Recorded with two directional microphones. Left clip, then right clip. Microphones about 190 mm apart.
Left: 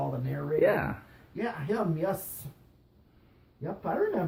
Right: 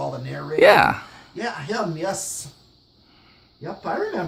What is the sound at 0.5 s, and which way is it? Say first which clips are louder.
Speech: right 13 dB; 40° right (ahead or behind).